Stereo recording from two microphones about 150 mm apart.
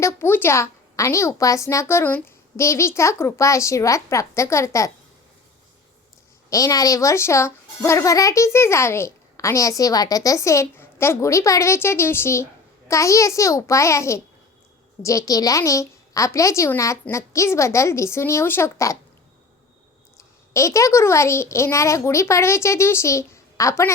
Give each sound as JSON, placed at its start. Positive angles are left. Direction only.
{"t": 0.0, "sound": "a woman's voice", "side_deg": 15}
{"t": 6.5, "sound": "a woman's voice", "side_deg": 25}
{"t": 20.1, "sound": "a woman's voice", "side_deg": 20}